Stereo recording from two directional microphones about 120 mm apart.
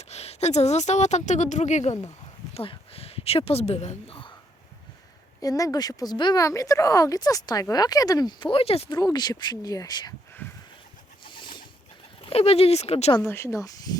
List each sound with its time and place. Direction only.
0.0 s a woman's voice: 65° left (ahead or behind)
2.6 s speech: 55° left (ahead or behind)
5.4 s speech: 30° left (ahead or behind); by 8.9 s 55° left (ahead or behind)
8.9 s speech: 35° left (ahead or behind)
10.4 s a sound: 15° left (ahead or behind)
11.3 s bird: 40° left (ahead or behind)
12.2 s speech: 55° left (ahead or behind)
13.2 s speech: 20° left (ahead or behind)